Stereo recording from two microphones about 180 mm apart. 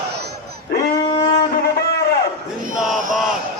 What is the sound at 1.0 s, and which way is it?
Wind instrument, 25° left (ahead or behind).